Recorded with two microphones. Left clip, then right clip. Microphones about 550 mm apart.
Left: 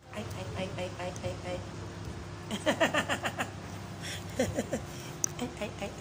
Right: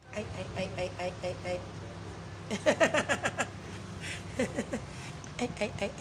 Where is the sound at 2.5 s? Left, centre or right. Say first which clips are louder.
Right 2 dB; right.